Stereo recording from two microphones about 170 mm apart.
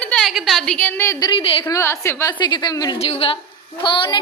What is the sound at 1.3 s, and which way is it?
Speech, 30° left (ahead or behind).